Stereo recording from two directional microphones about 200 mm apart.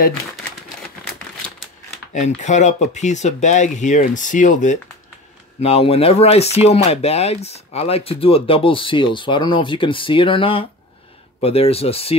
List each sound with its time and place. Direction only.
2.1 s speech: 35° left (ahead or behind)